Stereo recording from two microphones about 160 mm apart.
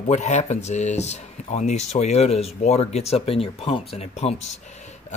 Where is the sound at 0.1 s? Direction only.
45° left (ahead or behind).